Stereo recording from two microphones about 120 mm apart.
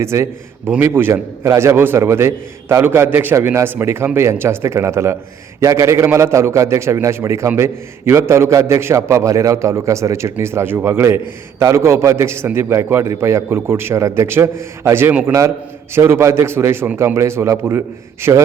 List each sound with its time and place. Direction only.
0.0 s a man's voice: 20° right (ahead or behind)